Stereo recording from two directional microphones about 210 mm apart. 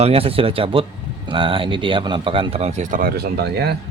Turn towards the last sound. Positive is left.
turn(degrees=-50)  # may be behind; listen again after turning